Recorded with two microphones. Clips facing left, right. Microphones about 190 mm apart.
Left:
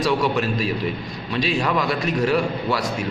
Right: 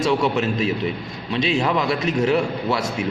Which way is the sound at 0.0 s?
25° right (ahead or behind).